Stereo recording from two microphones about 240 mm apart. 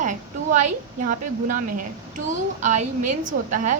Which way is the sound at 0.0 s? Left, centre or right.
Right.